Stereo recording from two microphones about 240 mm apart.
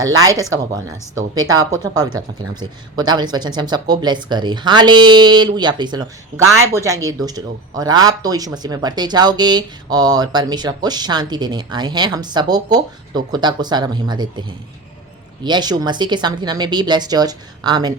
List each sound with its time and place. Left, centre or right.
0.0 s speech: centre
15.4 s speech: centre